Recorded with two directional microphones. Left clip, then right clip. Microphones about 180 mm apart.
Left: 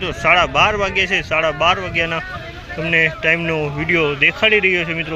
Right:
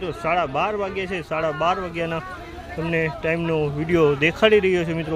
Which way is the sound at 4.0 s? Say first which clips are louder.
Left 1 dB; 30° right (ahead or behind).